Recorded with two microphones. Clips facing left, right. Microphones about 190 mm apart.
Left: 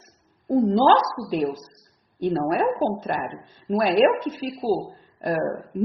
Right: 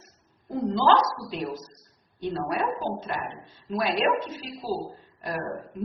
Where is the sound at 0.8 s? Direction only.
45° left (ahead or behind).